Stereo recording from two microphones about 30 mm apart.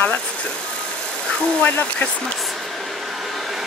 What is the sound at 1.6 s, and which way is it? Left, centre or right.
Speech, left.